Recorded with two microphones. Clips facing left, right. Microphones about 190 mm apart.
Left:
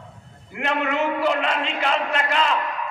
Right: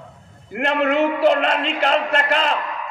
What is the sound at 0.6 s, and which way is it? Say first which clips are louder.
A man's voice: right 5 dB; 40° right (ahead or behind).